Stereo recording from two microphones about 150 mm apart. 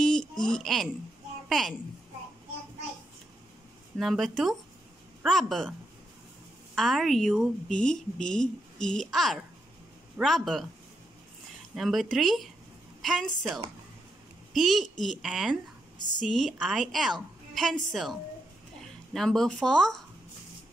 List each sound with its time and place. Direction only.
0.0 s a sound: 5° left (ahead or behind)
0.5 s a woman's voice: centre (ahead or behind)
4.0 s a woman's voice: centre (ahead or behind)
11.7 s a woman's voice: centre (ahead or behind)
14.5 s a woman's voice: centre (ahead or behind)
19.1 s a woman's voice: 5° left (ahead or behind)